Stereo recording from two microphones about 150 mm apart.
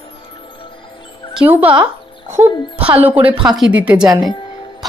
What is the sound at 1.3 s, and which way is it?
Speech, 10° right (ahead or behind).